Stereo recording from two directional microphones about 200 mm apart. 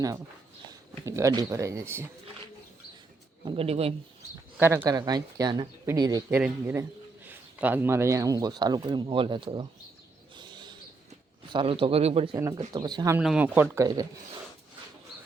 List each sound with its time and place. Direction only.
1.0 s speech: 15° right (ahead or behind)
3.4 s a man's voice: 25° right (ahead or behind)
4.5 s a man's voice: 10° right (ahead or behind)
10.3 s a sound: 20° right (ahead or behind)
11.4 s a man's voice: 25° right (ahead or behind)
12.3 s a man's voice: 15° right (ahead or behind)
13.1 s speech: 5° right (ahead or behind)